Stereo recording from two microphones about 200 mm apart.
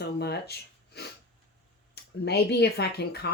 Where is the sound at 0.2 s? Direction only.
55° left (ahead or behind).